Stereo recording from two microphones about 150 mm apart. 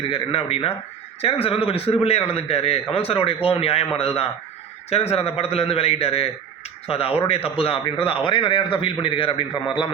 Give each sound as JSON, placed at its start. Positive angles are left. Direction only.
{"t": 0.1, "sound": "a man's voice", "side_deg": 35}